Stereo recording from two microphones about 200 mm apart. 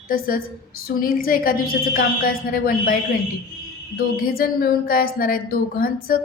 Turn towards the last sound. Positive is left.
turn(degrees=45)  # may be behind; listen again after turning